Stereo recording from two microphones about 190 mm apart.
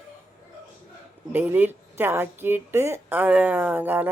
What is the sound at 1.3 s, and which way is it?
Speech, 10° right (ahead or behind).